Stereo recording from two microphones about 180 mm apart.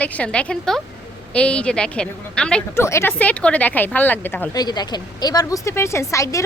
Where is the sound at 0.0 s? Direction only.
5° left (ahead or behind).